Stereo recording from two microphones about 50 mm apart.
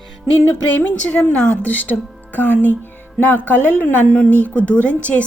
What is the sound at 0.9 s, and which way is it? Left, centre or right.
Speech, left.